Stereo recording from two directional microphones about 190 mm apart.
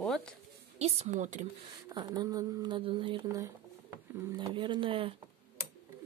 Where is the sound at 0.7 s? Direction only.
35° right (ahead or behind).